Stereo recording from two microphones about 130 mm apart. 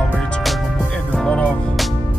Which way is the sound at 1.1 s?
10° left (ahead or behind).